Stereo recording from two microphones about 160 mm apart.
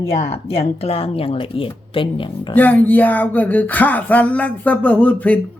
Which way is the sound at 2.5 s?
10° left (ahead or behind).